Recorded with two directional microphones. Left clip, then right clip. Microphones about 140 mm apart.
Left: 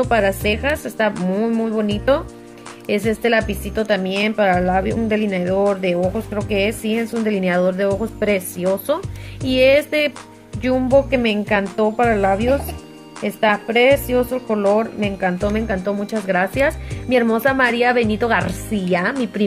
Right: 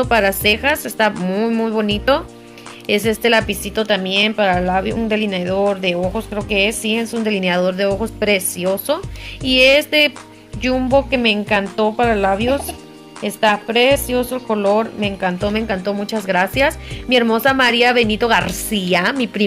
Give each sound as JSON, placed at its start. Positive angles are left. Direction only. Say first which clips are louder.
{"t": 0.0, "sound": "a woman's voice", "louder": "right 2 dB", "side_deg": 5}